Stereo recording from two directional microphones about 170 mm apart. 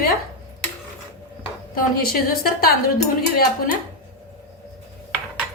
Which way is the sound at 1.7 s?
60° left (ahead or behind).